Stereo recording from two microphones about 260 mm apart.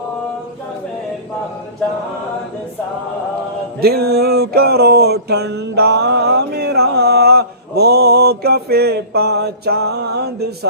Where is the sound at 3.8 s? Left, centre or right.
Right.